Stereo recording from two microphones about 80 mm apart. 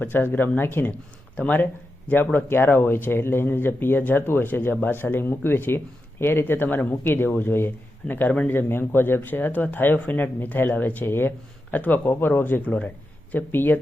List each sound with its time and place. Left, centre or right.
0.0 s speech: left